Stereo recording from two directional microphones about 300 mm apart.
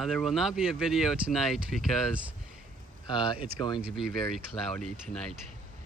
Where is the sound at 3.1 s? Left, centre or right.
Centre.